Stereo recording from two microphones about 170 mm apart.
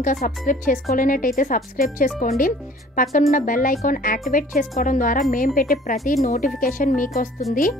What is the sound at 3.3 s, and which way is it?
Speech, 55° left (ahead or behind).